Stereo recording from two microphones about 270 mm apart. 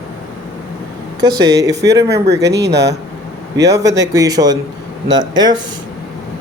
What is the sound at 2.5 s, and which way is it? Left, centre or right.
Speech, right.